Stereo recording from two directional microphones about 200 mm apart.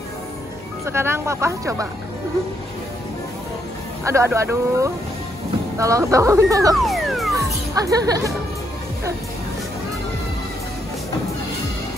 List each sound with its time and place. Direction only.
0.8 s speech: 10° right (ahead or behind)
4.0 s speech: 15° right (ahead or behind)
6.7 s music: centre (ahead or behind)
7.3 s music: 15° right (ahead or behind)